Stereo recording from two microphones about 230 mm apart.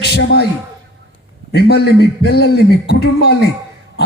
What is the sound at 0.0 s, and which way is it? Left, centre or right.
Speech, left.